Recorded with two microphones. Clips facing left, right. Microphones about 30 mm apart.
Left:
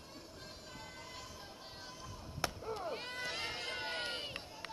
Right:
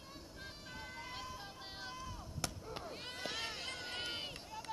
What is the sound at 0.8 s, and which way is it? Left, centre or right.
Vehicle, right.